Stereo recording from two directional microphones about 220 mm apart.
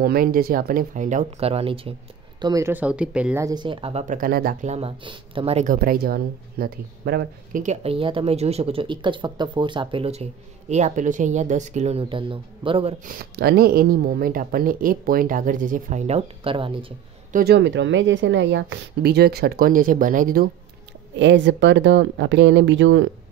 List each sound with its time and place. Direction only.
0.0 s speech: 40° right (ahead or behind); by 2.0 s 25° right (ahead or behind)
2.4 s speech: 15° right (ahead or behind); by 7.6 s 45° right (ahead or behind)
7.6 s speech: 30° right (ahead or behind)
13.0 s speech: 40° right (ahead or behind); by 16.8 s 25° right (ahead or behind)
17.3 s a woman's voice: 45° right (ahead or behind)
21.2 s speech: 55° right (ahead or behind)